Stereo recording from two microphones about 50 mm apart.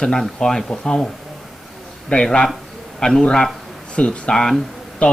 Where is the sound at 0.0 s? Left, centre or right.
Centre.